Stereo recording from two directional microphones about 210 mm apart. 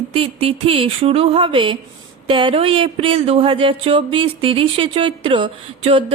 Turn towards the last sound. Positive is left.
turn(degrees=-25)  # may be behind; listen again after turning